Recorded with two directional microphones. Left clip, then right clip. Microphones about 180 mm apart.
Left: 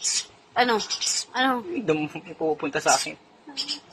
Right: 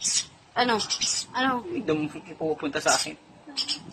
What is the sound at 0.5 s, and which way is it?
A woman's voice, 15° left (ahead or behind).